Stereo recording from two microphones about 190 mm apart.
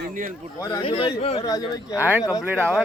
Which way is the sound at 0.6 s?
20° left (ahead or behind).